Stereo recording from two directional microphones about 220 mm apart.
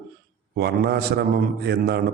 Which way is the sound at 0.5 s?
45° right (ahead or behind).